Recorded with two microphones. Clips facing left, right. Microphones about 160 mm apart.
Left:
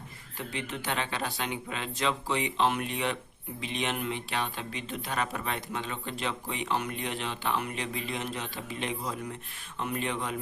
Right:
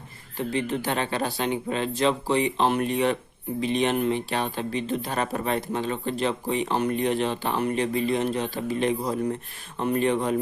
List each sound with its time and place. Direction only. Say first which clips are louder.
0.3 s speech: right 10 dB; 35° right (ahead or behind)